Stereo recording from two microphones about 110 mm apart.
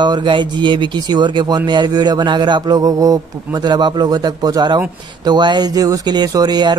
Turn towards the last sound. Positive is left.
turn(degrees=-40)  # may be behind; listen again after turning